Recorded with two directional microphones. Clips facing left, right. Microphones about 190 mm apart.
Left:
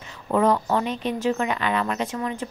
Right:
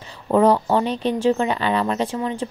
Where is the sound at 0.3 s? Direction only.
30° right (ahead or behind).